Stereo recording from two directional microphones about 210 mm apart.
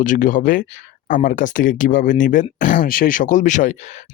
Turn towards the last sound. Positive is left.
turn(degrees=35)  # may be behind; listen again after turning